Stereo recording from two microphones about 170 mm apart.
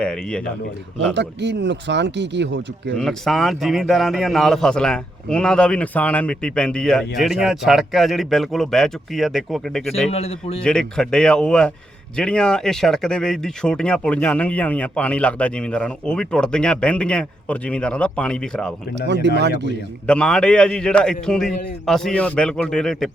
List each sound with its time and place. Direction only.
0.0 s a man's voice: 5° left (ahead or behind)
1.1 s speech: 90° right
3.0 s a man's voice: centre (ahead or behind)
10.1 s a man's voice: 35° left (ahead or behind)
10.6 s a man's voice: 5° left (ahead or behind)
18.9 s speech: 90° right
20.1 s a man's voice: 5° left (ahead or behind)